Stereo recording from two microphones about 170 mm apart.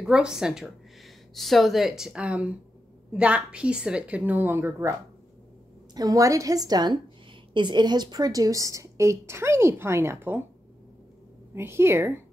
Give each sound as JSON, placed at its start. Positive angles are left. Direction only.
{"t": 0.0, "sound": "a woman's voice", "side_deg": -5}
{"t": 5.9, "sound": "a woman's voice", "side_deg": -20}
{"t": 11.5, "sound": "a woman's voice", "side_deg": -15}